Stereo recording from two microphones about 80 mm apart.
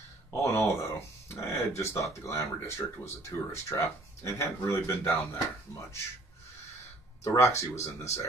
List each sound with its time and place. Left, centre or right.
0.4 s a sound: left
3.2 s speech: left
7.2 s speech: left